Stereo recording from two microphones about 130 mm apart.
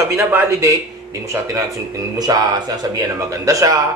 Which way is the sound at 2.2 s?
30° right (ahead or behind).